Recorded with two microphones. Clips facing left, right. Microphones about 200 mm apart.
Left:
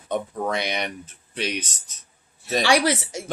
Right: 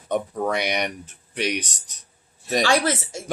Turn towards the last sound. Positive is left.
turn(degrees=15)  # may be behind; listen again after turning